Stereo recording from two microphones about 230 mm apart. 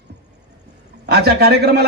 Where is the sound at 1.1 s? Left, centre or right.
Right.